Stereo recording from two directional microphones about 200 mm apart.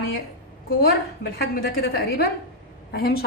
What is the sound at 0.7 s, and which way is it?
A woman's voice, 50° left (ahead or behind).